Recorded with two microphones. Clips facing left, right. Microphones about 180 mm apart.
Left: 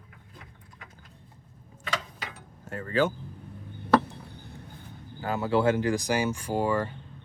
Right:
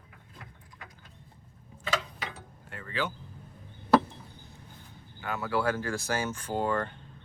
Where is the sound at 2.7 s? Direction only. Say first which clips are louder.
Left 8 dB; 45° left (ahead or behind).